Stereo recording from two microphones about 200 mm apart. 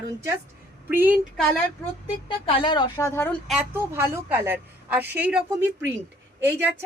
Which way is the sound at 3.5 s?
5° right (ahead or behind).